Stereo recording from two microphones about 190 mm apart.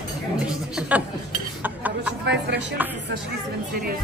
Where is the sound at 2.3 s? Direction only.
65° right (ahead or behind).